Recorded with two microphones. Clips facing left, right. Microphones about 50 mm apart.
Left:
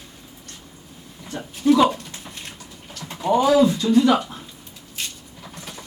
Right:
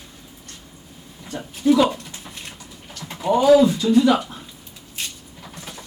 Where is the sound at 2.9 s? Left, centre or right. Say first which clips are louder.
Even; centre.